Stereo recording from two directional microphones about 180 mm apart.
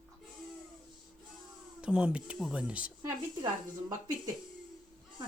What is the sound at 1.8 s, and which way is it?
Speech, 5° right (ahead or behind).